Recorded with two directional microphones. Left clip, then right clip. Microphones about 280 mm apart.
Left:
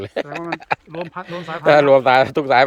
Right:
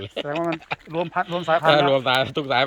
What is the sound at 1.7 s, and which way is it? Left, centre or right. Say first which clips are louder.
Speech: left 9 dB; centre.